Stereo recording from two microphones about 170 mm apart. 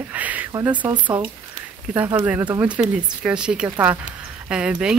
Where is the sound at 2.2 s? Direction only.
10° right (ahead or behind).